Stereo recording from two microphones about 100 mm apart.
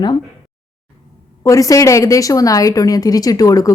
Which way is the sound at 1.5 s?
35° left (ahead or behind).